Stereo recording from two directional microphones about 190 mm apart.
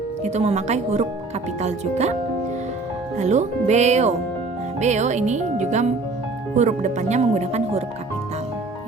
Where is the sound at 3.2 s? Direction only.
35° right (ahead or behind).